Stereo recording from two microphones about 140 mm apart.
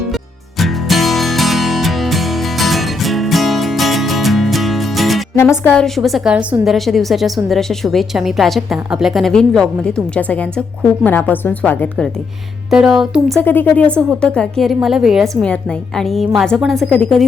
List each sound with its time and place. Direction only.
0.6 s music: centre (ahead or behind)
5.4 s a woman's voice: 15° left (ahead or behind)
5.7 s a woman's voice: centre (ahead or behind)
12.7 s a woman's voice: 5° right (ahead or behind)
13.4 s a woman's voice: 15° left (ahead or behind)